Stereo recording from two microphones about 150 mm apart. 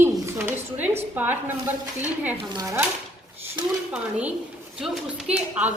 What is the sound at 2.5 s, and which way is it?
Speech, 25° right (ahead or behind).